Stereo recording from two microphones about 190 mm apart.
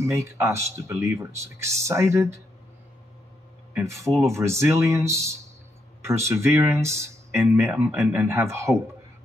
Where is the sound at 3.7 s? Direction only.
15° right (ahead or behind).